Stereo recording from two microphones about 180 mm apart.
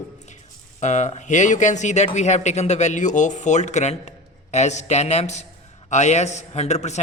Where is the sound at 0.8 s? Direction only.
40° left (ahead or behind).